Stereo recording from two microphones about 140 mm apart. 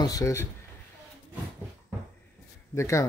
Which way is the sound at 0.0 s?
25° left (ahead or behind).